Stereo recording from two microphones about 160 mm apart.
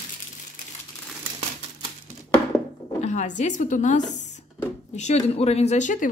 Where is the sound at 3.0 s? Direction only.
45° left (ahead or behind).